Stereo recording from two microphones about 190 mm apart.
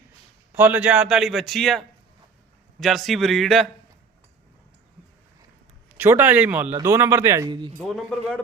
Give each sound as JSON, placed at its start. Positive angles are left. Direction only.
{"t": 0.5, "sound": "a man's voice", "side_deg": -10}
{"t": 2.8, "sound": "a man's voice", "side_deg": 0}
{"t": 6.0, "sound": "speech", "side_deg": -10}
{"t": 7.8, "sound": "a man's voice", "side_deg": 0}